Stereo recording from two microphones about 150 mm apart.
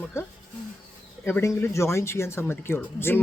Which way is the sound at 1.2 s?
15° left (ahead or behind).